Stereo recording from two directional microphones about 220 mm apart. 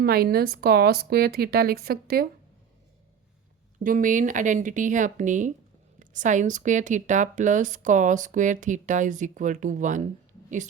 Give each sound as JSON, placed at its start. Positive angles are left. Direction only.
{"t": 0.0, "sound": "speech", "side_deg": -45}
{"t": 3.8, "sound": "speech", "side_deg": -35}